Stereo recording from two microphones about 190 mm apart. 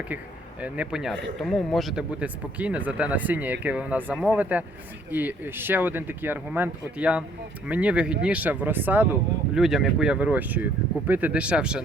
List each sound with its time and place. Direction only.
0.6 s speech: 5° right (ahead or behind)